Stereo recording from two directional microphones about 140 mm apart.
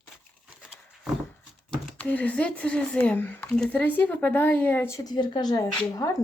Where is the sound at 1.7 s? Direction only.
10° left (ahead or behind).